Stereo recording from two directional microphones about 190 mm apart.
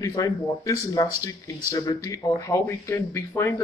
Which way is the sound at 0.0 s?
20° left (ahead or behind).